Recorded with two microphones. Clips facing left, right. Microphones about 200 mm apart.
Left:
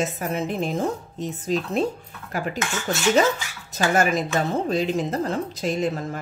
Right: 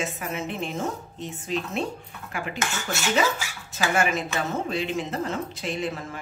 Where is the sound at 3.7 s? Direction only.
40° left (ahead or behind).